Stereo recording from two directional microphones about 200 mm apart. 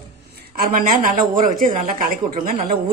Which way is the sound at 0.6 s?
40° right (ahead or behind).